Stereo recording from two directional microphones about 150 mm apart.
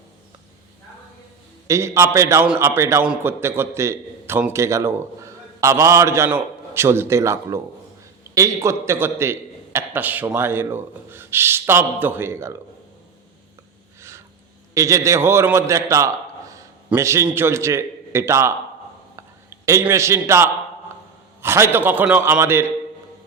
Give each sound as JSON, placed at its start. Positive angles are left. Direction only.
{"t": 1.6, "sound": "a man's voice", "side_deg": -20}
{"t": 14.7, "sound": "a man's voice", "side_deg": -20}
{"t": 19.1, "sound": "a sound", "side_deg": -20}
{"t": 21.4, "sound": "a man's voice", "side_deg": -15}